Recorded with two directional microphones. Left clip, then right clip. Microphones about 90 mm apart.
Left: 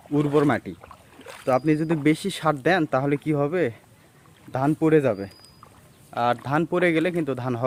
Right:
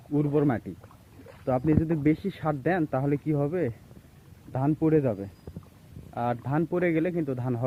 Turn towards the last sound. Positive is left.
turn(degrees=40)  # may be behind; listen again after turning